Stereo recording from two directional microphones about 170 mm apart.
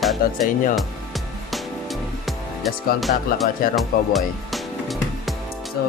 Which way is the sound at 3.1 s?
60° left (ahead or behind).